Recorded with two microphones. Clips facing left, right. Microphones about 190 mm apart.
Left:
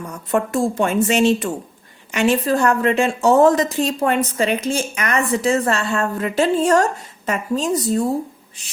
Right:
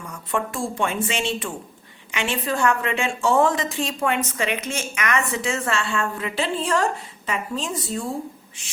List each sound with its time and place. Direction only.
0.1 s a woman's voice: 40° left (ahead or behind)